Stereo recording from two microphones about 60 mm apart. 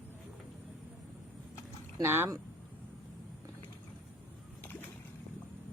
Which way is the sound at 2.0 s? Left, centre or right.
Right.